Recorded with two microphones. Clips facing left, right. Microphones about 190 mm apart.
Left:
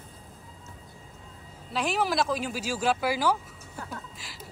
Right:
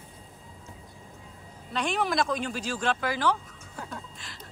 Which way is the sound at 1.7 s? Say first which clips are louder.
Left 1 dB; 5° left (ahead or behind).